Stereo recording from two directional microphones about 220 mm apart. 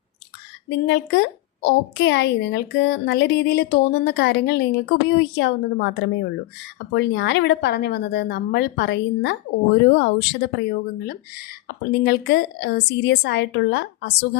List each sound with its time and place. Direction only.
0.7 s a woman's voice: 50° left (ahead or behind)